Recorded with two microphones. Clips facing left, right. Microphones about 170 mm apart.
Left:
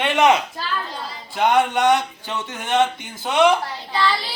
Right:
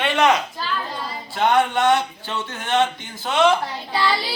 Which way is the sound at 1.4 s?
15° left (ahead or behind).